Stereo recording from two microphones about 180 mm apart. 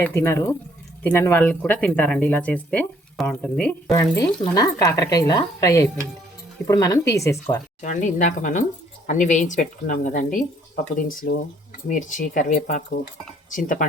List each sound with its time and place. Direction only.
0.0 s speech: 15° left (ahead or behind)
3.8 s speech: 20° left (ahead or behind)
7.8 s speech: 40° left (ahead or behind)